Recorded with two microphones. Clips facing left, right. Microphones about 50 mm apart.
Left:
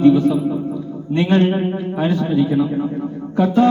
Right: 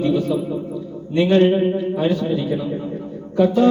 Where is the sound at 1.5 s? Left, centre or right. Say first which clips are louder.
Right 2 dB; left.